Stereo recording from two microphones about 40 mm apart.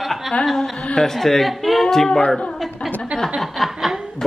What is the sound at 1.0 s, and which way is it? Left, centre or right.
Speech, centre.